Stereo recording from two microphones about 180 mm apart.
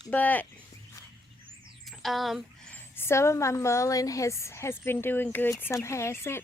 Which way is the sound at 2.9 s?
15° left (ahead or behind).